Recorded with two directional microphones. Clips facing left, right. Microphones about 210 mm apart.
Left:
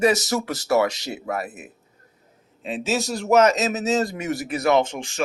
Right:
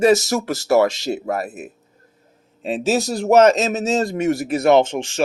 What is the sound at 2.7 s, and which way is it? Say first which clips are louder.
A man's voice: right 5 dB; 35° right (ahead or behind).